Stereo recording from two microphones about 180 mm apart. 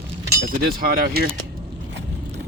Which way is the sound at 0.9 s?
55° right (ahead or behind).